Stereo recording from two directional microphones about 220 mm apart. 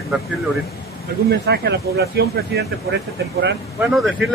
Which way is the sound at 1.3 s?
50° right (ahead or behind).